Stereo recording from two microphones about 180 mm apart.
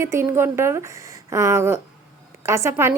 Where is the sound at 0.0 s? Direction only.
15° right (ahead or behind).